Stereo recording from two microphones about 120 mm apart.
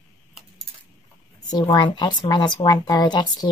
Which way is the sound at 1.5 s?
35° left (ahead or behind).